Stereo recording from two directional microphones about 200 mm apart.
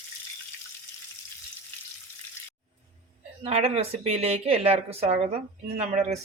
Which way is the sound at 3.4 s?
30° right (ahead or behind).